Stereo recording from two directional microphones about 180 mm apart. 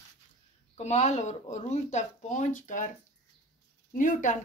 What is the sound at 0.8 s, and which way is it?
A woman's voice, 40° left (ahead or behind).